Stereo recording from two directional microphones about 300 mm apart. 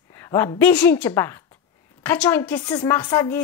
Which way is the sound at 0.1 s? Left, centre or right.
Centre.